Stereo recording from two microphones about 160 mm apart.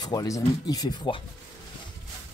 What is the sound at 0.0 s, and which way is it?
Speech, 25° left (ahead or behind).